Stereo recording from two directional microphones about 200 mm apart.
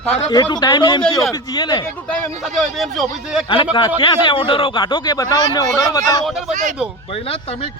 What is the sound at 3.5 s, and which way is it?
A man's voice, 25° left (ahead or behind).